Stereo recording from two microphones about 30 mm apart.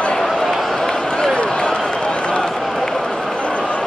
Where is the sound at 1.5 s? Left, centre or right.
Left.